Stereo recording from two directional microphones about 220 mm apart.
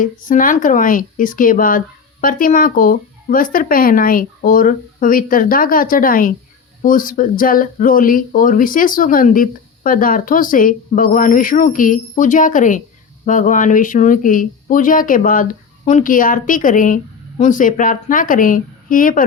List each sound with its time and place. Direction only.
0.0 s speech: 40° left (ahead or behind)